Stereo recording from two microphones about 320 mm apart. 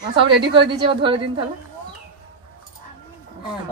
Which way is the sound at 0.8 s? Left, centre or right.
Centre.